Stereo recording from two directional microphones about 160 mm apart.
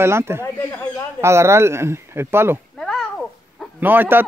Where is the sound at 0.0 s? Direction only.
15° right (ahead or behind).